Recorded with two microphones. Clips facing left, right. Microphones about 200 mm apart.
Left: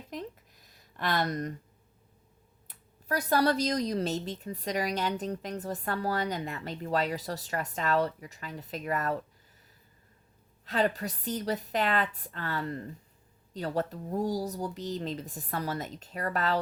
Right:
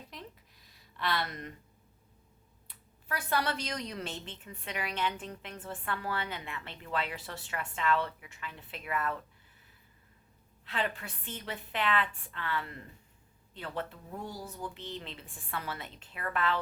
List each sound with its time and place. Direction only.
0.1 s a sound: 45° left (ahead or behind)
2.6 s a woman's voice: 40° left (ahead or behind)
10.7 s a woman's voice: 40° left (ahead or behind)